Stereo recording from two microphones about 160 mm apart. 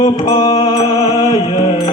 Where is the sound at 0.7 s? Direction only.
25° left (ahead or behind).